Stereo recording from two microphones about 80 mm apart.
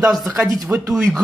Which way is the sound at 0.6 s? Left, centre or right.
Right.